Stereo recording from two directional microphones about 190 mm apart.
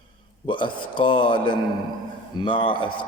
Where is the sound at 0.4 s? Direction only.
25° left (ahead or behind).